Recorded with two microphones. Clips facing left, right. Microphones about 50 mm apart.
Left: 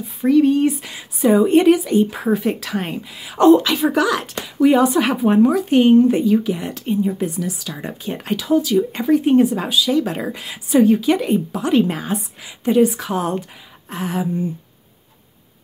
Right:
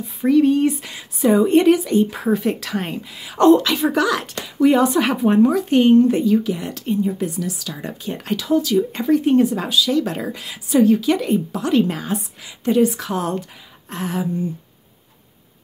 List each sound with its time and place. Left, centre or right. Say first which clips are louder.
0.2 s speech: left 1 dB; centre